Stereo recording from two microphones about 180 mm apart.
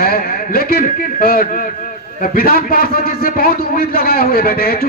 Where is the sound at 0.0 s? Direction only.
55° left (ahead or behind).